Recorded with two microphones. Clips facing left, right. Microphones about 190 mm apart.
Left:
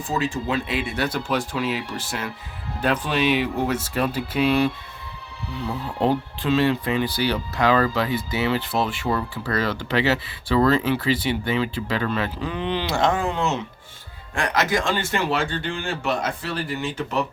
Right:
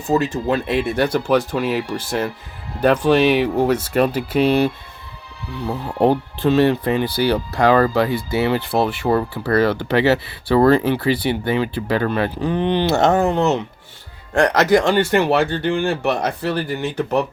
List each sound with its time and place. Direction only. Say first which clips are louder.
0.1 s speech: right 7 dB; 65° right (ahead or behind)
5.6 s speech: right 6 dB; 60° right (ahead or behind)
14.4 s speech: right 7 dB; 70° right (ahead or behind)